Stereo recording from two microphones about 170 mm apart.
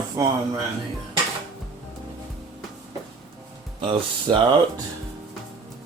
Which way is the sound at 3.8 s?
30° right (ahead or behind).